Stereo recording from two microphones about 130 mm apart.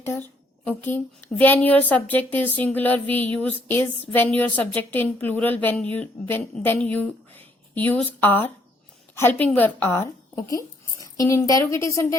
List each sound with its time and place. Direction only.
0.0 s a woman's voice: 15° left (ahead or behind)